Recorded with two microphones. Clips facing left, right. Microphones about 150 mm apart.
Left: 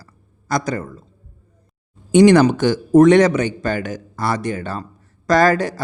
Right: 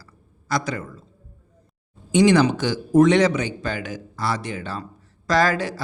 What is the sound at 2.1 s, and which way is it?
Speech, 55° left (ahead or behind).